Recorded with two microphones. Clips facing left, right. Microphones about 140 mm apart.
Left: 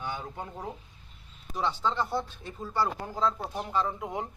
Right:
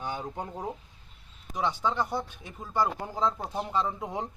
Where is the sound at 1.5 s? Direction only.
15° right (ahead or behind).